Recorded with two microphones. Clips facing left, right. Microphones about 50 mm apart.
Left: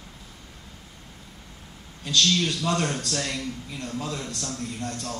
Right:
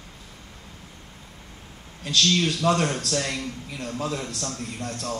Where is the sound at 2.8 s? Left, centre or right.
Centre.